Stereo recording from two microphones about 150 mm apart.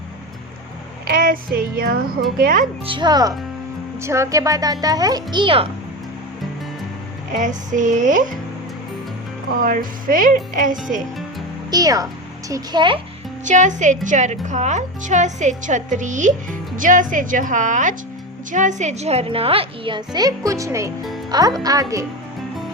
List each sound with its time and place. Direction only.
1.0 s child singing: 70° right (ahead or behind)
2.4 s a woman's voice: 65° right (ahead or behind)
2.8 s a child's voice: 30° right (ahead or behind)
7.3 s a woman's voice: 55° right (ahead or behind)
9.6 s a woman's voice: 65° right (ahead or behind)
11.7 s a child's voice: 25° right (ahead or behind)
13.4 s a woman's voice: 55° right (ahead or behind); by 22.0 s 20° right (ahead or behind)